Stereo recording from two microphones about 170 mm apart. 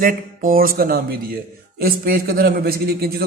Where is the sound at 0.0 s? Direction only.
55° right (ahead or behind).